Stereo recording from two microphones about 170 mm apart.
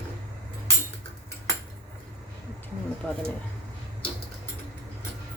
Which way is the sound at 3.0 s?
Centre (ahead or behind).